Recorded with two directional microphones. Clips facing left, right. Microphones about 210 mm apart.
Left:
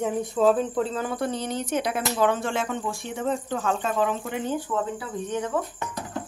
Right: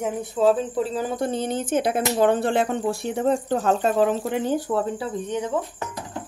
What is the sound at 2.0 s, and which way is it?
Speech, 35° right (ahead or behind).